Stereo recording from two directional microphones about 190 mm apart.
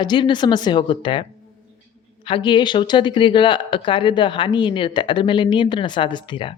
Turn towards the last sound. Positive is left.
turn(degrees=25)  # may be behind; listen again after turning